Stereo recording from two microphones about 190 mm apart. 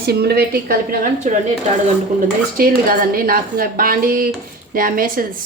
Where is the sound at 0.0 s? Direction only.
55° right (ahead or behind).